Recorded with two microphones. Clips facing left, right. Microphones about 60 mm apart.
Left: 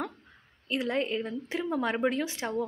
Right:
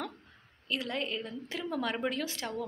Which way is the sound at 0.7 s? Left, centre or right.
Left.